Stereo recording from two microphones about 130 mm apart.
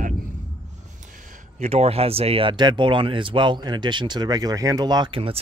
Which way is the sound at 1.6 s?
55° right (ahead or behind).